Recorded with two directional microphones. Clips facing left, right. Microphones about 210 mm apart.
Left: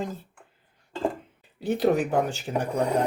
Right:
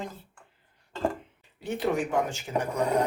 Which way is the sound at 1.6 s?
35° left (ahead or behind).